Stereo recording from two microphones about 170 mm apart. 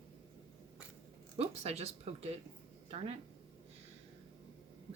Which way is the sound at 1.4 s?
40° right (ahead or behind).